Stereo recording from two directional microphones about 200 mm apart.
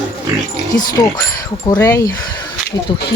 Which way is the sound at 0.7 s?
20° left (ahead or behind).